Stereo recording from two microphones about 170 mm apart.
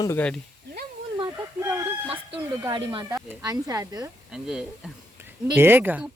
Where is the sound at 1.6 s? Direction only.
10° right (ahead or behind).